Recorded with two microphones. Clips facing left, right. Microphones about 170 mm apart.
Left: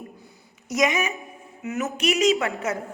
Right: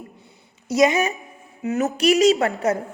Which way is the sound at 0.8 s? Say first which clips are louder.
Right 5 dB; 35° right (ahead or behind).